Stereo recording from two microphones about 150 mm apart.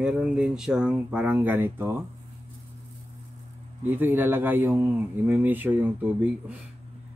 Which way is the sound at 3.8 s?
15° right (ahead or behind).